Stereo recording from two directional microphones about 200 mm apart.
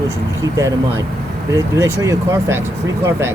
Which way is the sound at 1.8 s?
15° right (ahead or behind).